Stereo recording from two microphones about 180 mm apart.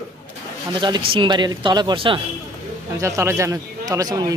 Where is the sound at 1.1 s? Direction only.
25° right (ahead or behind).